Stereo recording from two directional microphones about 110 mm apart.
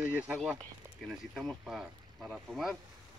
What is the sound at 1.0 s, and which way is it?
Speech, centre (ahead or behind).